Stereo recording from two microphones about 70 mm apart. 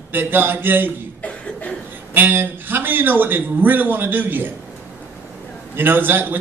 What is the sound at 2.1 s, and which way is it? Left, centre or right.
A man's voice, right.